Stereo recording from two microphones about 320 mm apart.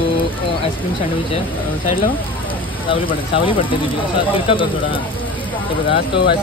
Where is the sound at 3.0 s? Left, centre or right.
Centre.